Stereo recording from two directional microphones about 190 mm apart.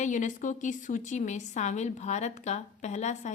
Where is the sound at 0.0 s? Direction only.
40° left (ahead or behind).